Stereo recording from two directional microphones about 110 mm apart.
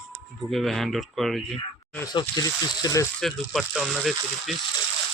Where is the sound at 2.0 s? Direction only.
40° left (ahead or behind).